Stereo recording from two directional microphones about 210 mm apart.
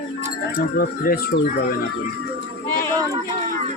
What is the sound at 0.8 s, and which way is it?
Speech, 45° left (ahead or behind).